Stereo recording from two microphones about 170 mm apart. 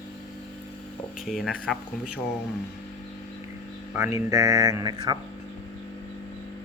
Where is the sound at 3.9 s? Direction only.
15° right (ahead or behind).